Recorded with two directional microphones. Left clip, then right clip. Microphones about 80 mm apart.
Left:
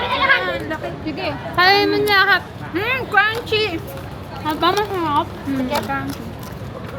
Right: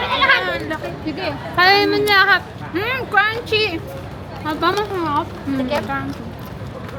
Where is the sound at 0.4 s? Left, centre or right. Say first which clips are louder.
Right 1 dB; right.